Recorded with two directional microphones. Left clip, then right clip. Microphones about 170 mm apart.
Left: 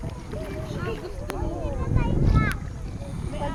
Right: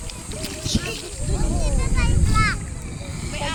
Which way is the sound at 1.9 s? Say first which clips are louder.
Right 5 dB; 40° left (ahead or behind).